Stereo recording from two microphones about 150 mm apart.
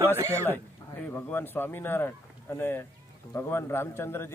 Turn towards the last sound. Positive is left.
turn(degrees=15)  # may be behind; listen again after turning